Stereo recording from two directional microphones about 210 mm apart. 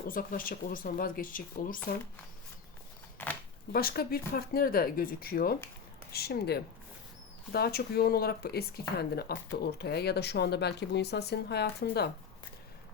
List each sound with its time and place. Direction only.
0.1 s speech: 40° left (ahead or behind)
3.2 s a sound: 10° left (ahead or behind)
3.7 s speech: 45° left (ahead or behind)